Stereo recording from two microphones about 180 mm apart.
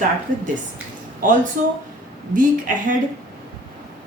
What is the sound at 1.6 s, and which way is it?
Speech, 45° right (ahead or behind).